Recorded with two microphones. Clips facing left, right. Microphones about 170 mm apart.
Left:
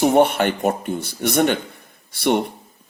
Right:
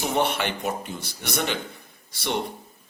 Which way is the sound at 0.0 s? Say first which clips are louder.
Left 9 dB; 50° left (ahead or behind).